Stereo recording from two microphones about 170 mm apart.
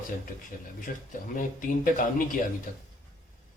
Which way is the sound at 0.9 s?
55° left (ahead or behind).